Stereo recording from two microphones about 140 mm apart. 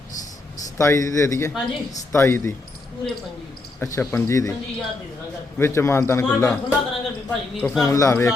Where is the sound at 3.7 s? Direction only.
20° left (ahead or behind).